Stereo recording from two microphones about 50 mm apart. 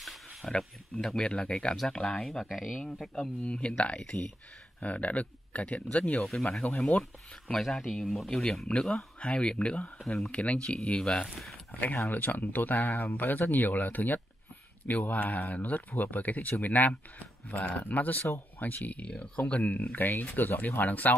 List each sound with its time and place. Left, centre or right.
0.0 s a sound: centre
0.5 s speech: centre
2.4 s speech: centre
3.2 s speech: left
7.5 s speech: centre; by 11.0 s left
11.0 s speech: centre
12.1 s speech: left